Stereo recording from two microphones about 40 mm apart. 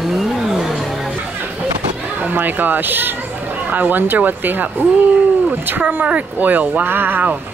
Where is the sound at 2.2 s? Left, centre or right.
Right.